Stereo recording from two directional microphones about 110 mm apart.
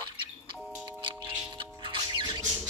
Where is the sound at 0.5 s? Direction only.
5° right (ahead or behind).